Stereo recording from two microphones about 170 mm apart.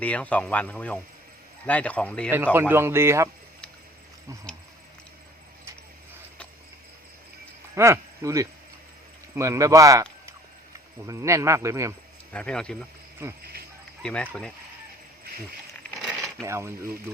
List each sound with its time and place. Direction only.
0.0 s speech: 10° left (ahead or behind)
2.3 s a man's voice: 10° right (ahead or behind)
7.8 s a man's voice: 15° right (ahead or behind)
12.3 s speech: 5° left (ahead or behind)
13.4 s speech: 65° right (ahead or behind)
14.0 s speech: 5° left (ahead or behind)
16.0 s coin: 5° right (ahead or behind)
16.5 s a man's voice: 15° right (ahead or behind)